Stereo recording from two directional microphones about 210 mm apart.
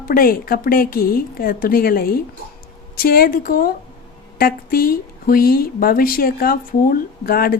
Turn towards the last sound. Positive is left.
turn(degrees=45)  # may be behind; listen again after turning